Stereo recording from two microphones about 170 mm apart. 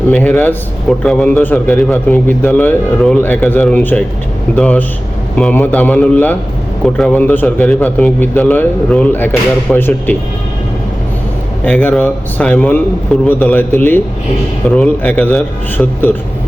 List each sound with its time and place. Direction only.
0.1 s a man's voice: 10° left (ahead or behind)
11.6 s a man's voice: 10° left (ahead or behind)